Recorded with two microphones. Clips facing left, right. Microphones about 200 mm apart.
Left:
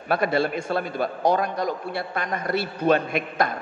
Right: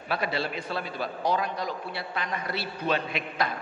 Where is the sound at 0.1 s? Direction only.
50° left (ahead or behind).